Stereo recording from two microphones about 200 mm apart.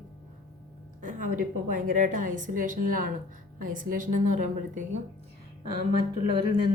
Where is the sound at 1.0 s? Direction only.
40° right (ahead or behind).